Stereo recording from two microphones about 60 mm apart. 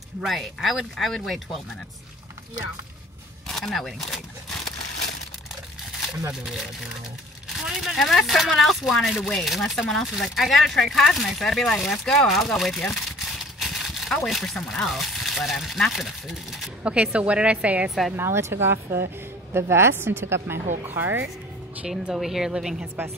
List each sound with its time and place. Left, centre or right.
0.2 s speech: centre
3.4 s speech: centre
6.4 s a woman's voice: centre
16.8 s a woman's voice: right
18.1 s a woman's voice: right
21.8 s a woman's voice: centre